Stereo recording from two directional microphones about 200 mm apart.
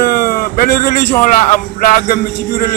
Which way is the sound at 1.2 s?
40° left (ahead or behind).